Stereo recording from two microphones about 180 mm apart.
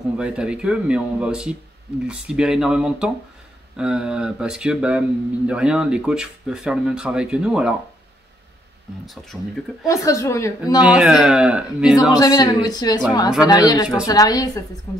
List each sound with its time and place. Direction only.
0.2 s speech: 5° right (ahead or behind)
9.0 s speech: centre (ahead or behind)
9.8 s a woman's voice: 15° left (ahead or behind)
10.8 s speech: 5° right (ahead or behind)
12.1 s speech: 20° left (ahead or behind)